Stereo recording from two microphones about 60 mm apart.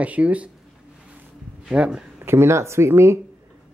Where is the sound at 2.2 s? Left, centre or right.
Right.